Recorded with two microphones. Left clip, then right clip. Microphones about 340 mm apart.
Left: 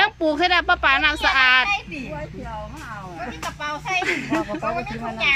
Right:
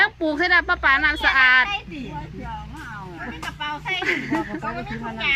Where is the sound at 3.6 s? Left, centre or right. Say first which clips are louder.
Left 1 dB; centre.